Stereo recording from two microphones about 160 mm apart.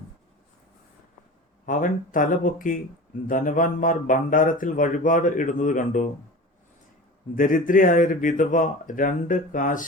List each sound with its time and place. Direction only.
1.6 s speech: 55° left (ahead or behind)
7.3 s speech: 55° left (ahead or behind)